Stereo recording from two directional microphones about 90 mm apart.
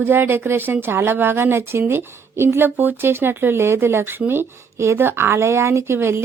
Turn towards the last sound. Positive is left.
turn(degrees=-25)  # may be behind; listen again after turning